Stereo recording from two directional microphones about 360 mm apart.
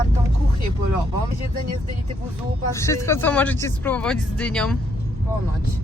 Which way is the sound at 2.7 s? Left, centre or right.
Centre.